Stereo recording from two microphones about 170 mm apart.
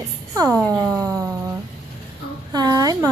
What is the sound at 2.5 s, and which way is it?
Speech, 25° right (ahead or behind).